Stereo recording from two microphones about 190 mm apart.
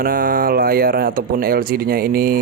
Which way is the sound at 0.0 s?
50° right (ahead or behind).